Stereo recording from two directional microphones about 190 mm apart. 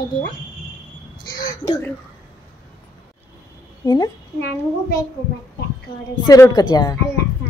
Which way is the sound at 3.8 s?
20° left (ahead or behind).